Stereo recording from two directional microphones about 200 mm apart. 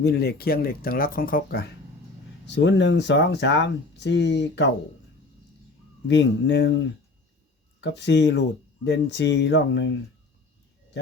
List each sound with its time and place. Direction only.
0.0 s speech: 55° left (ahead or behind)
2.6 s speech: 65° left (ahead or behind)
6.1 s speech: 60° left (ahead or behind)